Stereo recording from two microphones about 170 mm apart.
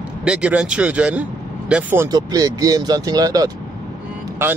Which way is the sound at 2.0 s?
20° right (ahead or behind).